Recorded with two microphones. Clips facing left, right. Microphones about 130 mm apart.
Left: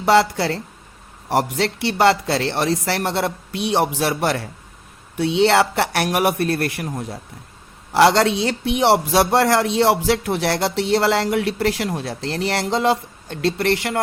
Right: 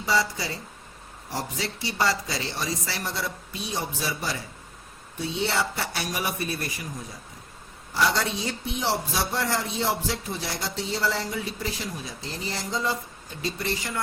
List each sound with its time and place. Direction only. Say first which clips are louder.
0.0 s a man's voice: left 10 dB; 70° left (ahead or behind)
7.9 s a man's voice: left 11 dB; 75° left (ahead or behind)